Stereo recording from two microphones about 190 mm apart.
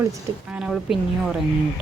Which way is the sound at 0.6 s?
5° right (ahead or behind).